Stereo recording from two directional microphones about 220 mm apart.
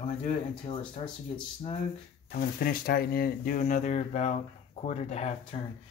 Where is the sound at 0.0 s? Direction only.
25° left (ahead or behind).